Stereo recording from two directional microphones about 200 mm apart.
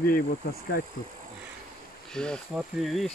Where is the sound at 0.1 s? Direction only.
45° left (ahead or behind).